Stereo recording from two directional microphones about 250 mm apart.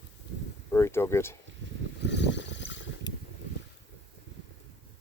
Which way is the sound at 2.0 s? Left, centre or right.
Left.